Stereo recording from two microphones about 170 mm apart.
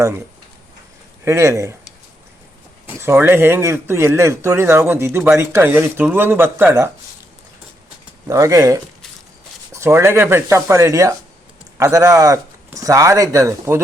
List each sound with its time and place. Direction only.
1.2 s speech: 15° right (ahead or behind)
3.0 s speech: 15° right (ahead or behind)
8.3 s speech: 20° right (ahead or behind)